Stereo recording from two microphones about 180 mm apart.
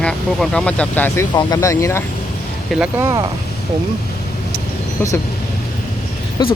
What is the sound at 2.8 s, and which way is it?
Speech, 15° right (ahead or behind).